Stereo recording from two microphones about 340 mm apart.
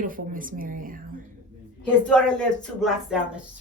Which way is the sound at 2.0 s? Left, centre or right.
Centre.